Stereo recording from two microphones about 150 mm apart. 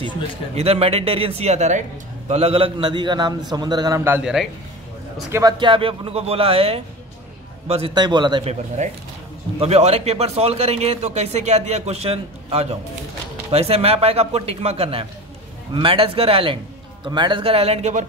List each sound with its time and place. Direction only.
0.6 s a man's voice: 40° right (ahead or behind); by 4.2 s 20° right (ahead or behind)
4.2 s speech: 5° right (ahead or behind)
5.3 s a man's voice: 25° right (ahead or behind)
9.6 s a man's voice: 45° right (ahead or behind)